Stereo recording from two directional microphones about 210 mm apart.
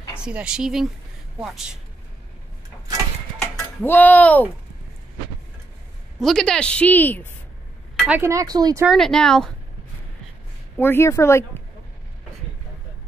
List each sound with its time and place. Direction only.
0.2 s a woman's voice: 5° right (ahead or behind)
3.8 s speech: 10° left (ahead or behind)
6.1 s a woman's voice: centre (ahead or behind)
7.9 s a sound: centre (ahead or behind)
8.2 s speech: 15° right (ahead or behind)
8.8 s a woman's voice: centre (ahead or behind)
10.8 s speech: 10° left (ahead or behind)